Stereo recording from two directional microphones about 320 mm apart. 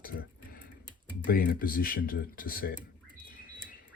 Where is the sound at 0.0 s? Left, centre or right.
Left.